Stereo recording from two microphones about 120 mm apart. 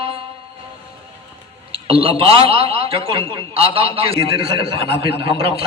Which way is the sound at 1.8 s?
50° right (ahead or behind).